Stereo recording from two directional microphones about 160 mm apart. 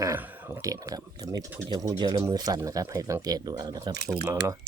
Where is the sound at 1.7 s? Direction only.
25° right (ahead or behind).